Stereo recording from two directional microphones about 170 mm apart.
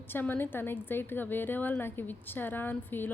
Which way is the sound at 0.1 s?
10° left (ahead or behind).